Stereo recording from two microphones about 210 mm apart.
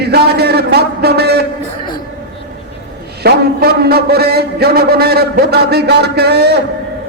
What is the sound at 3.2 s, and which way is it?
A man's voice, 50° right (ahead or behind).